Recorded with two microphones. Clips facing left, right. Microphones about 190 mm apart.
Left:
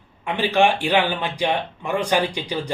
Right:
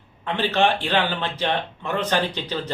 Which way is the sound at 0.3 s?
10° left (ahead or behind).